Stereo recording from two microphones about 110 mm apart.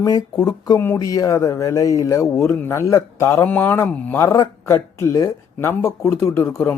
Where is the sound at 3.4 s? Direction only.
15° left (ahead or behind).